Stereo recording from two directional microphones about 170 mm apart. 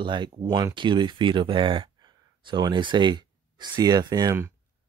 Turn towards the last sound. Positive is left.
turn(degrees=-20)  # may be behind; listen again after turning